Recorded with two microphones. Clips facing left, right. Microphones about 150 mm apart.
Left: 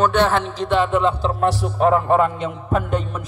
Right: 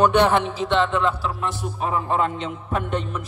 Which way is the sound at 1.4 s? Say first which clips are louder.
Left 12 dB; 80° left.